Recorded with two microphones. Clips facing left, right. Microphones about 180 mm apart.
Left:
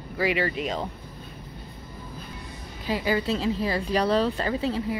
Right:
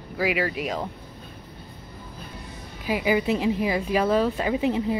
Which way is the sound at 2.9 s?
15° right (ahead or behind).